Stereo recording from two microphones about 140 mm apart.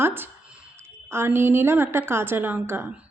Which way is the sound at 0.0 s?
15° right (ahead or behind).